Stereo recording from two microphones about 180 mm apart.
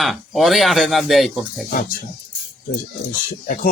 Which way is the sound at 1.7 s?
50° left (ahead or behind).